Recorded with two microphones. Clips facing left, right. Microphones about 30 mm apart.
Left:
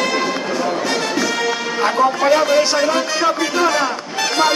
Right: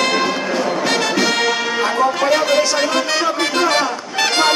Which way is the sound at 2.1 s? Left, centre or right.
Right.